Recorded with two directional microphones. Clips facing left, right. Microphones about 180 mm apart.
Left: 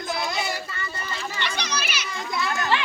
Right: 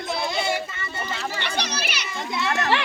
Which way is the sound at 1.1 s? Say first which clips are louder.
Right 3 dB; 70° right (ahead or behind).